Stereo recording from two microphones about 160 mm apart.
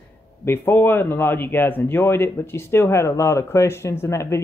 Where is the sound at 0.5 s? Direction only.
15° left (ahead or behind).